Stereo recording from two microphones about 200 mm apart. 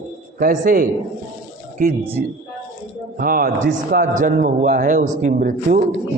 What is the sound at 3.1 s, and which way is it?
A man's voice, 45° right (ahead or behind).